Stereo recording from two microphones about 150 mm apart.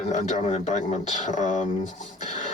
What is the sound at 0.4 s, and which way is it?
Speech, 45° left (ahead or behind).